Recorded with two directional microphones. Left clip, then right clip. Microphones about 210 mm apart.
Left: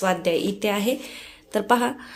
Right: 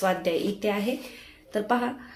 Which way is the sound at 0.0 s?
30° left (ahead or behind).